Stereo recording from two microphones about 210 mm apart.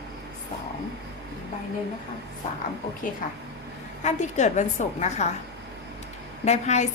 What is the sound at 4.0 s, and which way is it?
A woman's voice, 35° left (ahead or behind).